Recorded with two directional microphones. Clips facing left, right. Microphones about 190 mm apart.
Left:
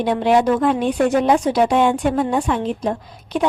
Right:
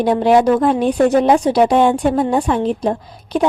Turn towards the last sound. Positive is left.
turn(degrees=-35)  # may be behind; listen again after turning